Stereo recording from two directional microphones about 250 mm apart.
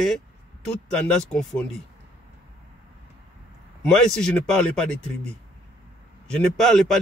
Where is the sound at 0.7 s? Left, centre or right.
Centre.